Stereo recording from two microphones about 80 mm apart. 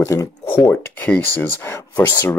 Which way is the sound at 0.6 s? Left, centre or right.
Left.